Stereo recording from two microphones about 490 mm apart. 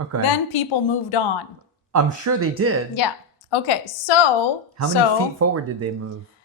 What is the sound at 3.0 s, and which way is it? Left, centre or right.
Speech, left.